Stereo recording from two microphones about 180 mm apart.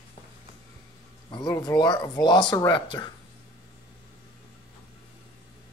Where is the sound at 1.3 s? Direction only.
25° left (ahead or behind).